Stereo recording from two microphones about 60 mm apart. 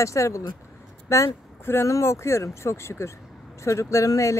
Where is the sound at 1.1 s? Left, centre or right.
Left.